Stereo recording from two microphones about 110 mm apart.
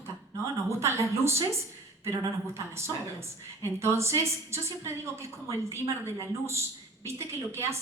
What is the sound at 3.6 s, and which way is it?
Speech, 25° right (ahead or behind).